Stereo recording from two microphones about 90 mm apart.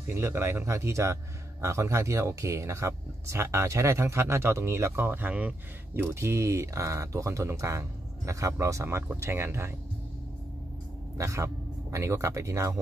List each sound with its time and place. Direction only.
0.0 s speech: 30° right (ahead or behind)
11.1 s speech: 35° right (ahead or behind)